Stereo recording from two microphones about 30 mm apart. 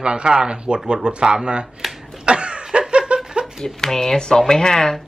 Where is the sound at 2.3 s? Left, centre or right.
Right.